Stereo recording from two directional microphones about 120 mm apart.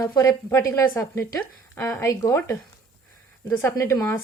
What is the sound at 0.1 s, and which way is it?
A woman's voice, 25° left (ahead or behind).